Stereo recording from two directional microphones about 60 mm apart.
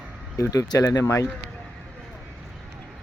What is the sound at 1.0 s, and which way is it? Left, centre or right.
Speech, left.